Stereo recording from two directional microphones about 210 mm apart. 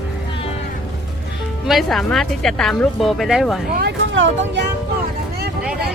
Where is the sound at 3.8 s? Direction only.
60° right (ahead or behind).